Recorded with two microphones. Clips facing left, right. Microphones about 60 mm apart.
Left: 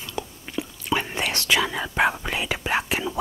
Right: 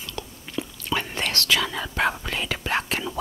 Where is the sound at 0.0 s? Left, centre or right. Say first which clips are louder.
Left 3 dB; centre.